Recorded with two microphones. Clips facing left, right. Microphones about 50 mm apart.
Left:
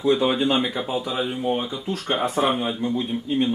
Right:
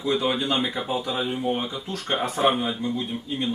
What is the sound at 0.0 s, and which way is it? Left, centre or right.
Speech, left.